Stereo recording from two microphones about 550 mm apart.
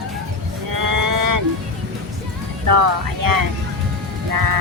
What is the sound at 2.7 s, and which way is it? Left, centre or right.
Speech, right.